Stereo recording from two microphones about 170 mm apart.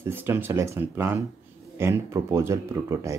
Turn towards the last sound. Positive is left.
turn(degrees=-15)  # may be behind; listen again after turning